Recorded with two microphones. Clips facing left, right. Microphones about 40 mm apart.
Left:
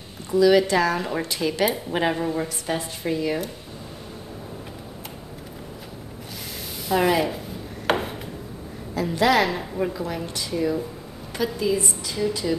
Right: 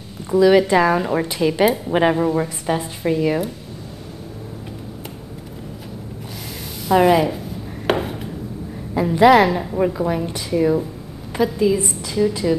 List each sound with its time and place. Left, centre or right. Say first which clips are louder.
0.3 s a woman's voice: right 4 dB; right
6.9 s speech: right 6 dB; centre
7.8 s chopping: right 3 dB; centre
8.9 s a woman's voice: right 8 dB; right
11.4 s a woman's voice: right 5 dB; centre